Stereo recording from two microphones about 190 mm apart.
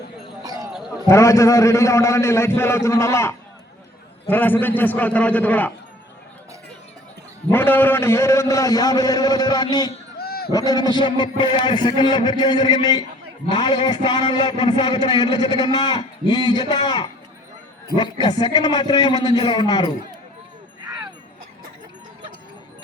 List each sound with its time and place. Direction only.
0.4 s basketball bounce: 20° right (ahead or behind)
1.0 s a man's voice: 15° left (ahead or behind)
7.5 s a man's voice: 10° left (ahead or behind)
10.2 s a sound: 55° left (ahead or behind)
10.5 s a man's voice: 20° left (ahead or behind)